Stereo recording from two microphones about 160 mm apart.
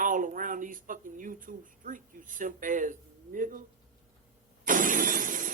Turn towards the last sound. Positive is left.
turn(degrees=-55)  # may be behind; listen again after turning